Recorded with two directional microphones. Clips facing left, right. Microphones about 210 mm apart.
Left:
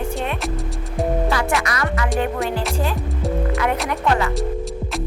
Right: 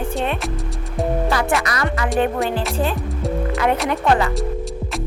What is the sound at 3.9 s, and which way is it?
Speech, 30° right (ahead or behind).